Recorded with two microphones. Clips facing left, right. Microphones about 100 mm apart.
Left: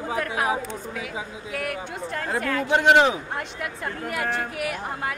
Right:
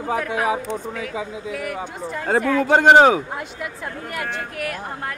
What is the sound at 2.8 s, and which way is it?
Speech, 55° right (ahead or behind).